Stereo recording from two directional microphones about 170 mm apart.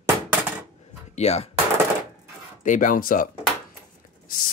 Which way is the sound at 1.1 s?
40° left (ahead or behind).